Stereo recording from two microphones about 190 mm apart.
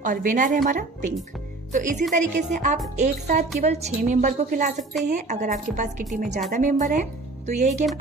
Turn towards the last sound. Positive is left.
turn(degrees=-40)  # may be behind; listen again after turning